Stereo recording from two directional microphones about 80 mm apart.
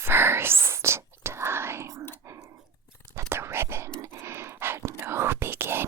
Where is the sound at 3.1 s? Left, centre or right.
Right.